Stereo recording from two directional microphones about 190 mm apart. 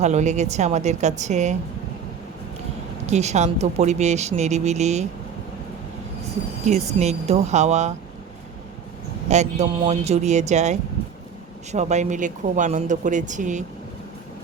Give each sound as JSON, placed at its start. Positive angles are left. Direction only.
{"t": 0.0, "sound": "speech", "side_deg": -40}
{"t": 3.1, "sound": "speech", "side_deg": -35}
{"t": 6.7, "sound": "speech", "side_deg": -35}
{"t": 9.3, "sound": "speech", "side_deg": -35}